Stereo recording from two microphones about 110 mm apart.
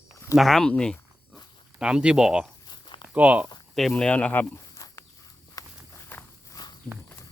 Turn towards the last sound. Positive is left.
turn(degrees=40)  # may be behind; listen again after turning